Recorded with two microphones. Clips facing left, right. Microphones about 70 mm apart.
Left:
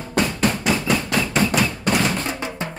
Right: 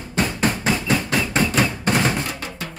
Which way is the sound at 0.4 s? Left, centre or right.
Right.